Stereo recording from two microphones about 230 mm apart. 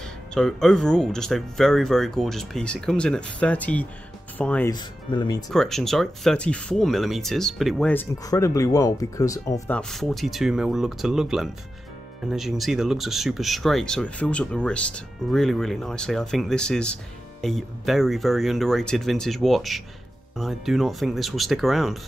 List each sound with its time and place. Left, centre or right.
0.0 s speech: centre
4.7 s speech: centre
5.5 s speech: centre
9.8 s speech: centre